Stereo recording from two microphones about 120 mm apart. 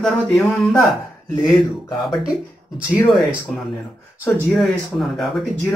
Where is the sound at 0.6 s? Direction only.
Centre (ahead or behind).